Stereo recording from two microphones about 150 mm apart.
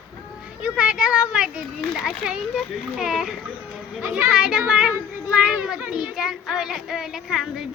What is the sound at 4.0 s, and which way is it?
Speech, 15° right (ahead or behind).